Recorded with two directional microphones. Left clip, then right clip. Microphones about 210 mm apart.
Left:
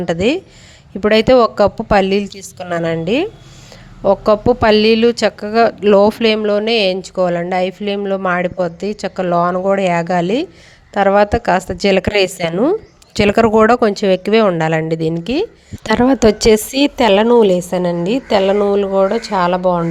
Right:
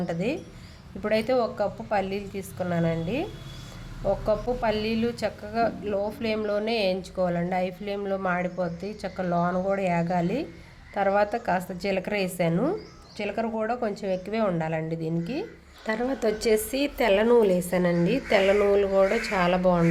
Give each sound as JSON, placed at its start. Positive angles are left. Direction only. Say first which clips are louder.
{"t": 0.0, "sound": "a woman's voice", "louder": "left 13 dB", "side_deg": 40}